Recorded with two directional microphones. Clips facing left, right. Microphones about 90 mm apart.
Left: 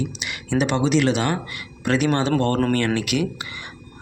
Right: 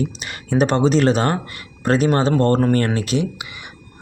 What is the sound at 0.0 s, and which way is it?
Speech, 40° right (ahead or behind).